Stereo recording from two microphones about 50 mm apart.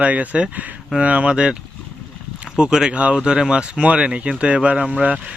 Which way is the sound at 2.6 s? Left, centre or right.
Centre.